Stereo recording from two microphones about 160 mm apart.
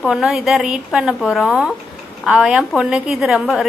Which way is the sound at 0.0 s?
Centre (ahead or behind).